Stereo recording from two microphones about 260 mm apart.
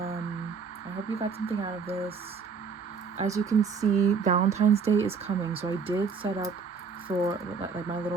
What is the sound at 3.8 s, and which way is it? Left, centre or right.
Speech, right.